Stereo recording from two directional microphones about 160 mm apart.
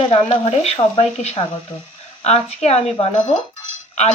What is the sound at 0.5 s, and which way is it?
Speech, 45° left (ahead or behind).